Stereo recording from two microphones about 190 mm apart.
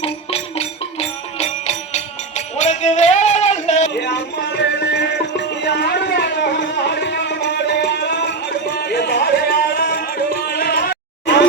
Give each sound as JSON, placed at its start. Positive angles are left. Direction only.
{"t": 0.0, "sound": "music", "side_deg": 30}
{"t": 3.9, "sound": "music", "side_deg": 65}